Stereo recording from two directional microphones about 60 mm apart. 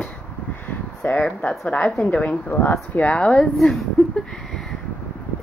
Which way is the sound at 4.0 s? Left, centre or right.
Centre.